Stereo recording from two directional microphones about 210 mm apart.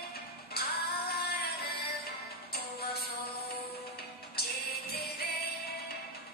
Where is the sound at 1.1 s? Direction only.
50° left (ahead or behind).